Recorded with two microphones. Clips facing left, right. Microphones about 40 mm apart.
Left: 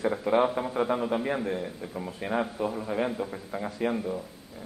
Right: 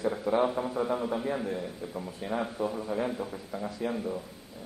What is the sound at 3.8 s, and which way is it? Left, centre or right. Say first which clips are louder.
Speech: left 5 dB; left.